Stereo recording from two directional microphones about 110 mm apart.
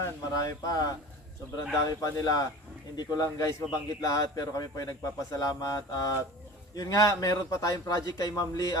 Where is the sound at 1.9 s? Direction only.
35° left (ahead or behind).